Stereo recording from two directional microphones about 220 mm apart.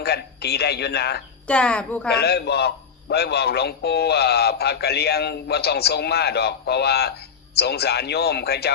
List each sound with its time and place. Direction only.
0.0 s a man's voice: 45° left (ahead or behind)
1.5 s speech: 5° left (ahead or behind)
2.0 s a man's voice: 45° left (ahead or behind)